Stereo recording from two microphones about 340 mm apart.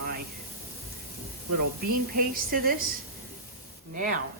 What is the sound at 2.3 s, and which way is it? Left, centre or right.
Speech, right.